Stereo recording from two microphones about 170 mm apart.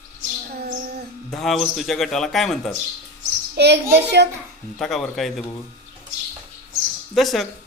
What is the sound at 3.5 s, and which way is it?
Speech, 80° right.